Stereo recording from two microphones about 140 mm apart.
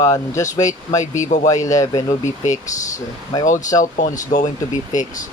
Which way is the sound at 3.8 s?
65° left (ahead or behind).